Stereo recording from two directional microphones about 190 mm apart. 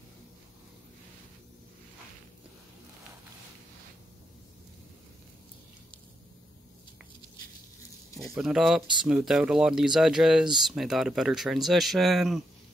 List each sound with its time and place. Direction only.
8.2 s speech: 5° right (ahead or behind)